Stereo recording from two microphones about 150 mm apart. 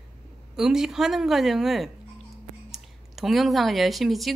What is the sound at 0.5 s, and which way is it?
Speech, 5° right (ahead or behind).